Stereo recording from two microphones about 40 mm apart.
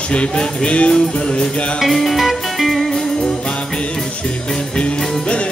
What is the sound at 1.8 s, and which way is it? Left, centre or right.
Music, centre.